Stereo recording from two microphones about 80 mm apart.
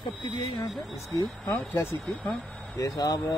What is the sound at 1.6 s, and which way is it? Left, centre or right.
Speech, left.